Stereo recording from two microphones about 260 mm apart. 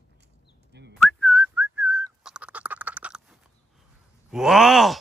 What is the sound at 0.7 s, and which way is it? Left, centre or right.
Whistling, right.